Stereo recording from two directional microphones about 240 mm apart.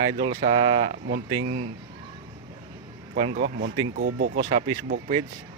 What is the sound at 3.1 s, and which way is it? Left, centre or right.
Speech, right.